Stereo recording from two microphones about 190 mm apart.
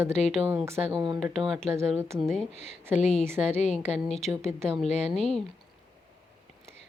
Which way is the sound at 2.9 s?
35° left (ahead or behind).